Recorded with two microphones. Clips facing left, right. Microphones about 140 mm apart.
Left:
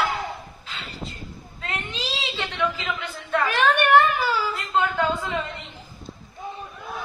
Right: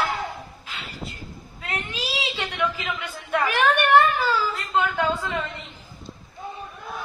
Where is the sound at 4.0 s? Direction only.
15° left (ahead or behind).